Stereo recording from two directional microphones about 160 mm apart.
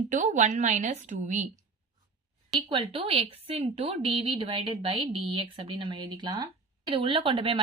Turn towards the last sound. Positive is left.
turn(degrees=-35)  # may be behind; listen again after turning